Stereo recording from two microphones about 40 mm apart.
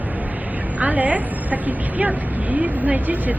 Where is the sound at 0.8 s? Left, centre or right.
Right.